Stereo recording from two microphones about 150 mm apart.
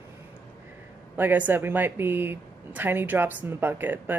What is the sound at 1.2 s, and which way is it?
A woman's voice, 10° right (ahead or behind).